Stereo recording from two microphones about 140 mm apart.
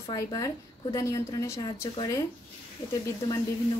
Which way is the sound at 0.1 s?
30° left (ahead or behind).